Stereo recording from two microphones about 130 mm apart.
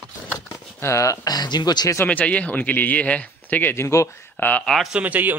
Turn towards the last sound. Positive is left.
turn(degrees=-15)  # may be behind; listen again after turning